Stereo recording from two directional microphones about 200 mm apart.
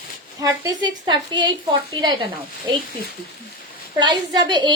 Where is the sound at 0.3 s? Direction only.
20° right (ahead or behind).